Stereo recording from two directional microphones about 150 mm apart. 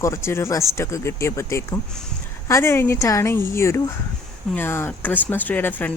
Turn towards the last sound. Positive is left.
turn(degrees=10)  # may be behind; listen again after turning